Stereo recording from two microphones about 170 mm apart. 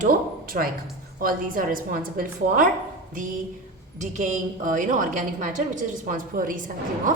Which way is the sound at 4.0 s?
45° right (ahead or behind).